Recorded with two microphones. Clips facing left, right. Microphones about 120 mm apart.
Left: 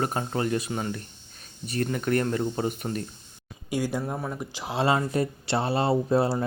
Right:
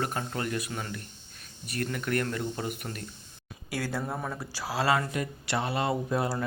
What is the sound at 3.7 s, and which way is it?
Speech, 15° left (ahead or behind).